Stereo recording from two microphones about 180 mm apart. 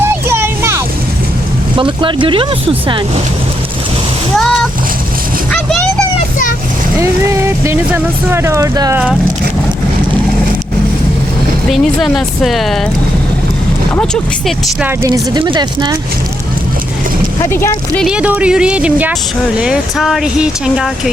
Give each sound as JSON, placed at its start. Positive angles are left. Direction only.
{"t": 0.0, "sound": "a sound", "side_deg": -15}
{"t": 1.7, "sound": "speech", "side_deg": -25}
{"t": 7.0, "sound": "speech", "side_deg": -15}
{"t": 11.7, "sound": "speech", "side_deg": 0}
{"t": 13.9, "sound": "speech", "side_deg": 5}
{"t": 14.8, "sound": "speech", "side_deg": -15}
{"t": 17.4, "sound": "speech", "side_deg": 15}
{"t": 18.0, "sound": "speech", "side_deg": -5}